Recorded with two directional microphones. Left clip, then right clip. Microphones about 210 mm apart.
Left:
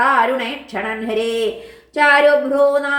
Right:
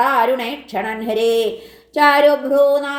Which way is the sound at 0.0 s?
35° right (ahead or behind).